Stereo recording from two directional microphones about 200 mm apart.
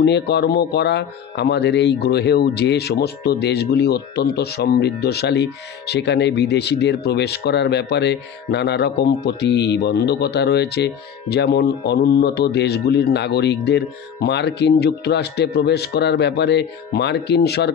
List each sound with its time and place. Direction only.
0.0 s speech: 55° left (ahead or behind)